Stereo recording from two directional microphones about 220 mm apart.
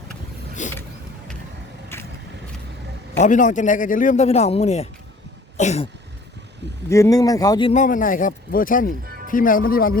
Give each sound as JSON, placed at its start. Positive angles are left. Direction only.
{"t": 0.6, "sound": "a man's voice", "side_deg": 35}
{"t": 1.9, "sound": "vehicle", "side_deg": 10}
{"t": 3.2, "sound": "a man's voice", "side_deg": 35}
{"t": 6.9, "sound": "speech", "side_deg": 15}
{"t": 7.7, "sound": "a man's voice", "side_deg": 35}